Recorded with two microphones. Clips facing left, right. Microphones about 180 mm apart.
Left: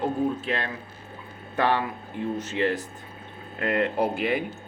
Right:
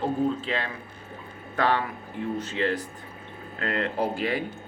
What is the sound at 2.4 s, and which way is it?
Speech, 15° left (ahead or behind).